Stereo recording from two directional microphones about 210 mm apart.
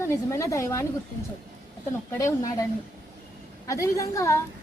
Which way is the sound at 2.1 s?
15° left (ahead or behind).